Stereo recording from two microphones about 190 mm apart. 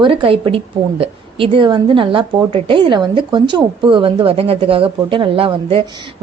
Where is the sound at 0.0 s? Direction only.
30° right (ahead or behind).